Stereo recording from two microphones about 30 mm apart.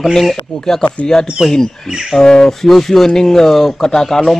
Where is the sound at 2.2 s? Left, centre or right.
Left.